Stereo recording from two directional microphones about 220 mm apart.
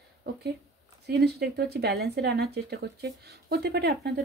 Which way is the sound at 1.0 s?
50° right (ahead or behind).